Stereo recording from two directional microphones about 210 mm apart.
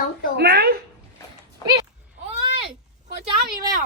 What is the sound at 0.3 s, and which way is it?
Speech, 45° right (ahead or behind).